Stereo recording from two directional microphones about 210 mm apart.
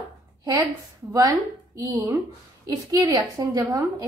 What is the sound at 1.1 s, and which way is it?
A woman's voice, 15° right (ahead or behind).